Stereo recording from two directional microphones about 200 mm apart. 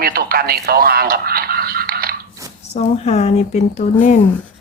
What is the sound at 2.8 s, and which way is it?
Speech, 30° left (ahead or behind).